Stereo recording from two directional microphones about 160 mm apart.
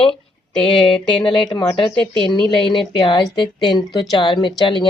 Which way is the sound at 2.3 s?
30° left (ahead or behind).